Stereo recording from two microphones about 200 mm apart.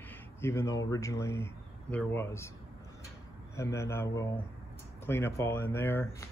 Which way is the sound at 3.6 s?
15° left (ahead or behind).